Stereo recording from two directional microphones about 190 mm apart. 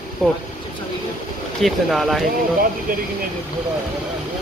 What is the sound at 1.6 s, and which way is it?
Speech, centre (ahead or behind).